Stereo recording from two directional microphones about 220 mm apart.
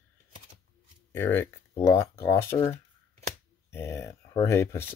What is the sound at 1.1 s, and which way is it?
Speech, 10° left (ahead or behind).